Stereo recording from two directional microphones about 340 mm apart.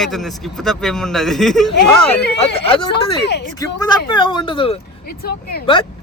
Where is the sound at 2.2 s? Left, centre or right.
Left.